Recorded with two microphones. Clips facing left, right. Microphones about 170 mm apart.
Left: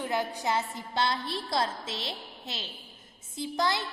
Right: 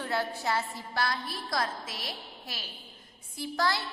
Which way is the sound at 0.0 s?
15° left (ahead or behind).